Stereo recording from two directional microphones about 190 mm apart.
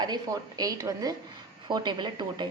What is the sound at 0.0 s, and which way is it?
A woman's voice, 20° right (ahead or behind).